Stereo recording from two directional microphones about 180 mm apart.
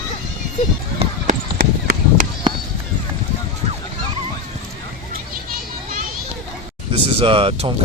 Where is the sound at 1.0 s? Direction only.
35° right (ahead or behind).